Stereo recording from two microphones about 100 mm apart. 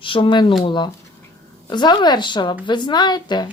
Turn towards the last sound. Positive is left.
turn(degrees=45)  # may be behind; listen again after turning